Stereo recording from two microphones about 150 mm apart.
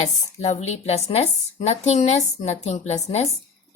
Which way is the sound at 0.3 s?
45° left (ahead or behind).